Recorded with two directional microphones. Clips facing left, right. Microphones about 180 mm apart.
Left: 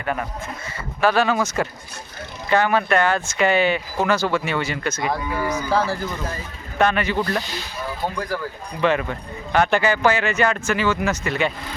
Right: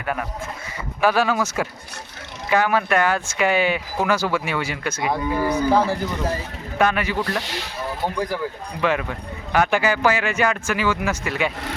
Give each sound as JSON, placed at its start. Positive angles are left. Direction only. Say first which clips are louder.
{"t": 0.0, "sound": "speech", "louder": "left 1 dB", "side_deg": -5}
{"t": 5.4, "sound": "speech", "louder": "right 3 dB", "side_deg": -35}
{"t": 5.7, "sound": "speech", "louder": "right 1 dB", "side_deg": -20}
{"t": 6.7, "sound": "speech", "louder": "left 1 dB", "side_deg": -10}
{"t": 7.3, "sound": "speech", "louder": "left 1 dB", "side_deg": -75}
{"t": 8.0, "sound": "speech", "louder": "right 1 dB", "side_deg": -15}
{"t": 8.8, "sound": "speech", "louder": "left 2 dB", "side_deg": -5}